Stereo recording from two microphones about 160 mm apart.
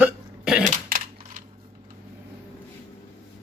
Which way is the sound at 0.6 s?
60° right (ahead or behind).